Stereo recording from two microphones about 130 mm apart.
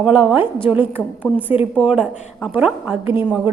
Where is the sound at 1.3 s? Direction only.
Centre (ahead or behind).